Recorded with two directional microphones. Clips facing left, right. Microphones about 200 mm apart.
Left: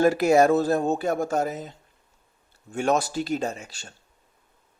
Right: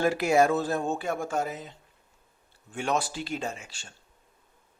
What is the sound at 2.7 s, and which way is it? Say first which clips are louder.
Speech: left 6 dB; 45° left (ahead or behind).